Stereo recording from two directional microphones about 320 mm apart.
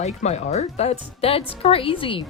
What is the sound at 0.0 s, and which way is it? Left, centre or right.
Speech, left.